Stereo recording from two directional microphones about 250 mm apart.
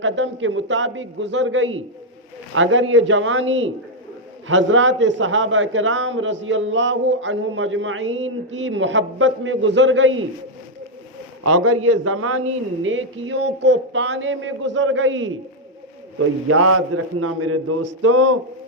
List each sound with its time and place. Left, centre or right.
0.0 s a man's voice: right
11.4 s a man's voice: right
12.8 s a man's voice: right
16.5 s a man's voice: right